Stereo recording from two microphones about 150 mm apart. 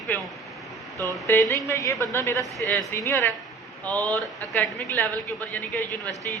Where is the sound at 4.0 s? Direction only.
25° right (ahead or behind).